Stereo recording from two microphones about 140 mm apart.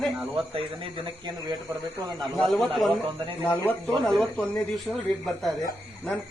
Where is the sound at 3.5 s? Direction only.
15° left (ahead or behind).